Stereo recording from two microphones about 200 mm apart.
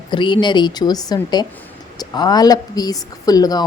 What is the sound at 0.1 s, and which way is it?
Speech, 25° left (ahead or behind).